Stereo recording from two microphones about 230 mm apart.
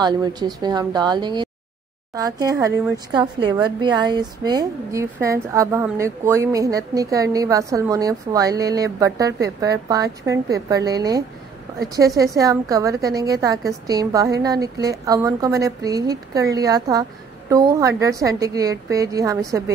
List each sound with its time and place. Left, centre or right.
0.0 s a woman's voice: centre